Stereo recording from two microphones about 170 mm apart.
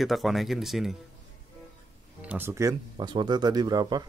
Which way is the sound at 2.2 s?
10° right (ahead or behind).